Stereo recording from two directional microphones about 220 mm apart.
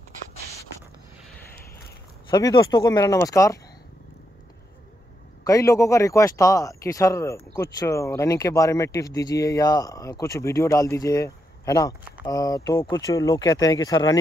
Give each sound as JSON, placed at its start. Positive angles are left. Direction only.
{"t": 2.3, "sound": "a man's voice", "side_deg": 15}
{"t": 5.4, "sound": "a man's voice", "side_deg": 15}